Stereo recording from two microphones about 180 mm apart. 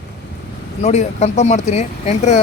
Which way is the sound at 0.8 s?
40° left (ahead or behind).